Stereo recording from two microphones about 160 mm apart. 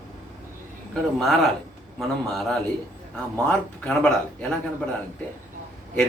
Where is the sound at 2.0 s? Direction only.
Centre (ahead or behind).